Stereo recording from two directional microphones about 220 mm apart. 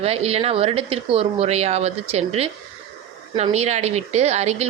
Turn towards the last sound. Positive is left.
turn(degrees=-30)  # may be behind; listen again after turning